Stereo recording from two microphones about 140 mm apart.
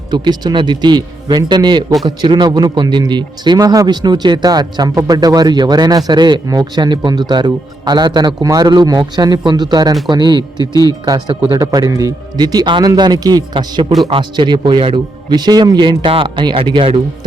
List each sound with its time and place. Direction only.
0.1 s speech: 30° right (ahead or behind)